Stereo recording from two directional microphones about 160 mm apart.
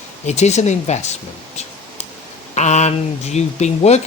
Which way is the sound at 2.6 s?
45° left (ahead or behind).